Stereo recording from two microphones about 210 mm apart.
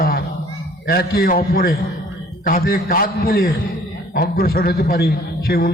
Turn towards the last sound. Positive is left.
turn(degrees=45)  # may be behind; listen again after turning